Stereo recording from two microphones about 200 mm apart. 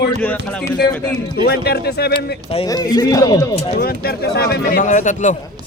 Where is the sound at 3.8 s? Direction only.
50° left (ahead or behind).